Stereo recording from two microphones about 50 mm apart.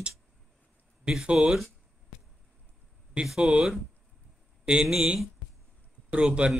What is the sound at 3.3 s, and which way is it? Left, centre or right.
Speech, centre.